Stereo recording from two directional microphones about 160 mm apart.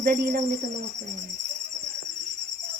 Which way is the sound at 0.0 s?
65° right (ahead or behind).